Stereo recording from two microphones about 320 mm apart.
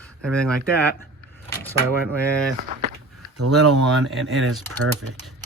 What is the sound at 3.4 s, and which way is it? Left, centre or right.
Speech, right.